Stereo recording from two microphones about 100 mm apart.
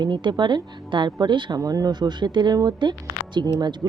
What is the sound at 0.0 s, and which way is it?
A woman's voice, 50° right (ahead or behind).